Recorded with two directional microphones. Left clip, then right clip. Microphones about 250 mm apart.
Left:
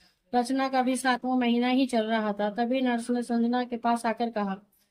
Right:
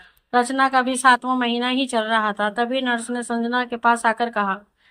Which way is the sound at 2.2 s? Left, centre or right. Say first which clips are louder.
Right 7 dB; right.